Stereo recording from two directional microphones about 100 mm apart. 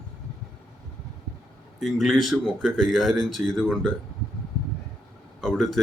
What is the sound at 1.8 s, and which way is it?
Speech, centre (ahead or behind).